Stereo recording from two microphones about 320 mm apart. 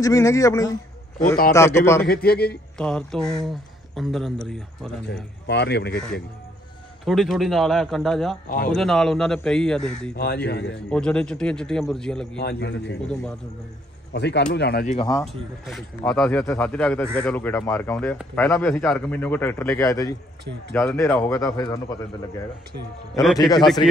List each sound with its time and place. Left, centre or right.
0.0 s speech: centre
2.0 s a man's voice: left
2.8 s speech: centre
5.5 s speech: left
7.1 s speech: centre
10.1 s speech: left
10.9 s speech: centre
12.4 s speech: left
14.1 s speech: left
15.0 s speech: centre
23.2 s speech: centre